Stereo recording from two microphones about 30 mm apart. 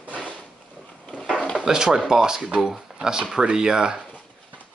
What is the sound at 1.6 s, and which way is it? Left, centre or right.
Speech, centre.